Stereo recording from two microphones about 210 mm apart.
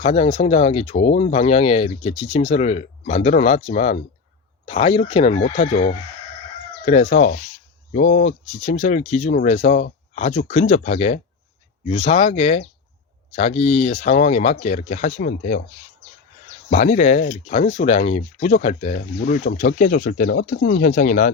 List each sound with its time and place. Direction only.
0.0 s speech: 30° left (ahead or behind)
6.8 s speech: 35° left (ahead or behind)
16.6 s speech: 35° left (ahead or behind)
20.4 s speech: 55° left (ahead or behind)
20.7 s speech: 40° left (ahead or behind)